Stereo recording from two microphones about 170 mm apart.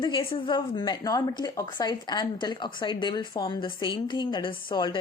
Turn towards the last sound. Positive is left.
turn(degrees=25)  # may be behind; listen again after turning